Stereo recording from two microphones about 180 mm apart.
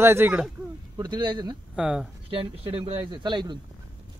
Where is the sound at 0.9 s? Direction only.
20° right (ahead or behind).